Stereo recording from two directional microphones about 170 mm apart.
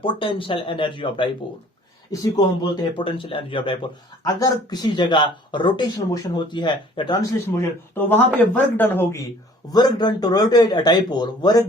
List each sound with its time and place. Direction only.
0.0 s speech: 30° left (ahead or behind)
2.3 s speech: 25° left (ahead or behind)
9.6 s speech: 25° left (ahead or behind)